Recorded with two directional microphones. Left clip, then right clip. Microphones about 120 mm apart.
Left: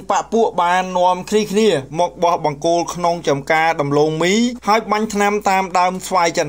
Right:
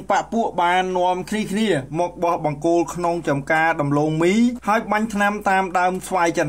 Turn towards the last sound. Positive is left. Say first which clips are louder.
# left 3 dB
turn(degrees=15)  # may be behind; listen again after turning